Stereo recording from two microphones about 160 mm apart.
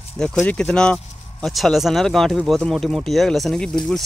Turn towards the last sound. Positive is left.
turn(degrees=0)  # may be behind; listen again after turning